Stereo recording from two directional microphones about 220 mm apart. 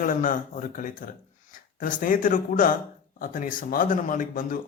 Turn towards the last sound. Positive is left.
turn(degrees=35)  # may be behind; listen again after turning